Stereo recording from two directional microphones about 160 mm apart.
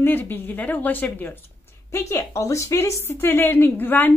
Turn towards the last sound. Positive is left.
turn(degrees=10)  # may be behind; listen again after turning